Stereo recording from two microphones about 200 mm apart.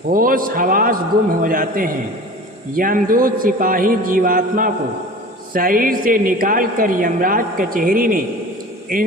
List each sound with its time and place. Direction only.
0.1 s a woman's voice: 45° right (ahead or behind)